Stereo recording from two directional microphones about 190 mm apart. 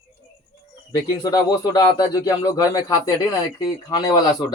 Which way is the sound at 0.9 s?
20° left (ahead or behind).